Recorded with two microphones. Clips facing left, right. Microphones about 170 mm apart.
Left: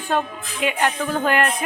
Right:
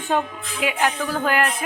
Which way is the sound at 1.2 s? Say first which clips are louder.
Left 1 dB; 5° right (ahead or behind).